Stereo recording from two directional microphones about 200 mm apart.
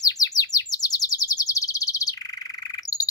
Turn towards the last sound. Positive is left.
turn(degrees=20)  # may be behind; listen again after turning